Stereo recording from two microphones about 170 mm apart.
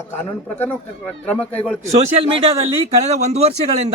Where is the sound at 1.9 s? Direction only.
40° right (ahead or behind).